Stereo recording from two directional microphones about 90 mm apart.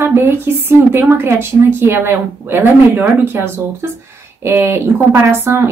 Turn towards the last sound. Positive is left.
turn(degrees=-30)  # may be behind; listen again after turning